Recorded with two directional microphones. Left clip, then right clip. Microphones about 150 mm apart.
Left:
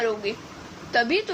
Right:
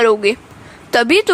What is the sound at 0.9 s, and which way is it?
Speech, 80° right.